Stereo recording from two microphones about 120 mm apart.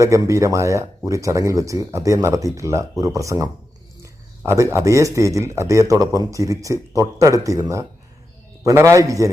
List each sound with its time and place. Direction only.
0.0 s speech: 25° right (ahead or behind)
8.6 s speech: 25° right (ahead or behind)